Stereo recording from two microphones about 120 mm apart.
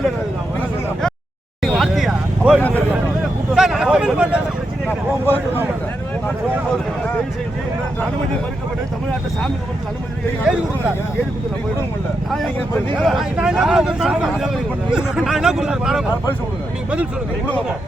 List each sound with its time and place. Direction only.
1.6 s vehicle: centre (ahead or behind)
2.6 s speech: 15° left (ahead or behind)
3.5 s a sound: 5° right (ahead or behind)
4.9 s speech: 15° left (ahead or behind)
10.4 s speech: 10° right (ahead or behind)
13.0 s speech: centre (ahead or behind)